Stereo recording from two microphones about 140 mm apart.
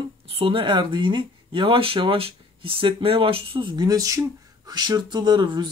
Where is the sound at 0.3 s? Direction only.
40° right (ahead or behind).